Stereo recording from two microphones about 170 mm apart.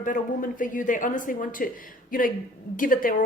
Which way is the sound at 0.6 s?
50° left (ahead or behind).